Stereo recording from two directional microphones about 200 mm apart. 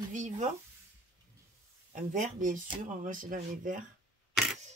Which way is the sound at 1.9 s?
40° right (ahead or behind).